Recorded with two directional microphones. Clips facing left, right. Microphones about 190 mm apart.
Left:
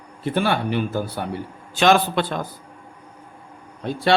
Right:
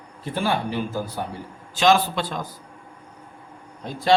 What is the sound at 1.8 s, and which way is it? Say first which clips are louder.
Speech: left 2 dB; 60° left (ahead or behind).